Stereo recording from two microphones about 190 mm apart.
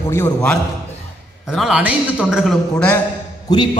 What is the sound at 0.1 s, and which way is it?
Speech, 10° left (ahead or behind).